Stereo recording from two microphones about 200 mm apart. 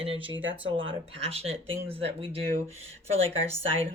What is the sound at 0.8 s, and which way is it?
Speech, 25° right (ahead or behind).